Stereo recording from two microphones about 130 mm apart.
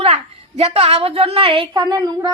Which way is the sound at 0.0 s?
50° right (ahead or behind).